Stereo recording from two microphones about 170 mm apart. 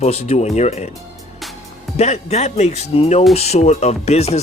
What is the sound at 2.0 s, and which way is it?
Speech, 40° left (ahead or behind).